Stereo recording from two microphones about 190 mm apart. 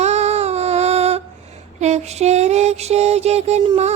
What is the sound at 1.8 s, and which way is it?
Mantra, 35° right (ahead or behind).